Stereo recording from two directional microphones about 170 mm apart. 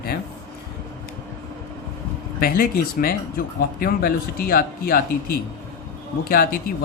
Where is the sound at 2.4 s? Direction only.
60° left (ahead or behind).